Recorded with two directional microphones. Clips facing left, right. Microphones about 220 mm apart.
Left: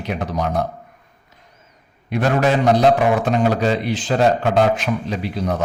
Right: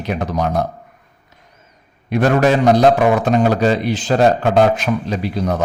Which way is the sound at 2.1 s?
45° right (ahead or behind).